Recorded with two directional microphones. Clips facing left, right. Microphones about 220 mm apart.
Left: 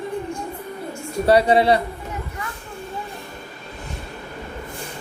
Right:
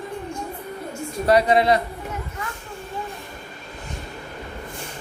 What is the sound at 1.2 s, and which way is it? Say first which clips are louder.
Speech: left 2 dB; 30° left (ahead or behind).